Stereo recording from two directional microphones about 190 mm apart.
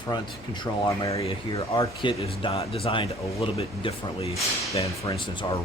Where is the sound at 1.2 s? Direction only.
30° left (ahead or behind).